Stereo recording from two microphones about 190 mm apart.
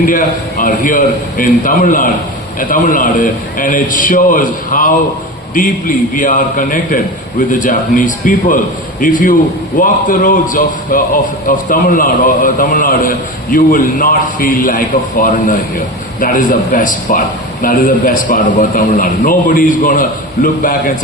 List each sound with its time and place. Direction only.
0.0 s a man's voice: 45° left (ahead or behind)